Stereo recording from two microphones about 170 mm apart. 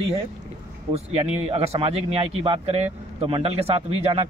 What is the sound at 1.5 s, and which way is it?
A man's voice, 35° right (ahead or behind).